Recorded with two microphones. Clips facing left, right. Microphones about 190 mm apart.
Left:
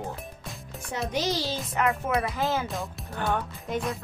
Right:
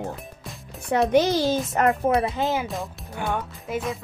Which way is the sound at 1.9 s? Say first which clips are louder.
Right 6 dB; 25° right (ahead or behind).